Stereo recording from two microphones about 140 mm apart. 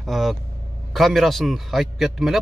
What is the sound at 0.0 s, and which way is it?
A man's voice, centre (ahead or behind).